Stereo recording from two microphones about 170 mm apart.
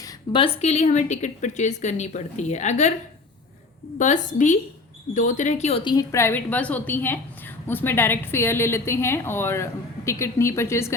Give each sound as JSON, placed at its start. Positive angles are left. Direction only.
{"t": 0.0, "sound": "a sound", "side_deg": 20}
{"t": 0.4, "sound": "a woman's voice", "side_deg": 35}
{"t": 3.9, "sound": "a woman's voice", "side_deg": 45}
{"t": 5.8, "sound": "a woman's voice", "side_deg": 25}